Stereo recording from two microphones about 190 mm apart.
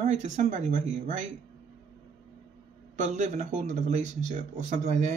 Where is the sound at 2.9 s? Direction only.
40° right (ahead or behind).